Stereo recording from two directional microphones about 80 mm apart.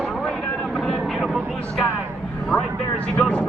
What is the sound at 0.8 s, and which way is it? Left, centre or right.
Vehicle, centre.